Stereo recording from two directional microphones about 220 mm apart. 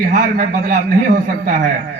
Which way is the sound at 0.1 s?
35° right (ahead or behind).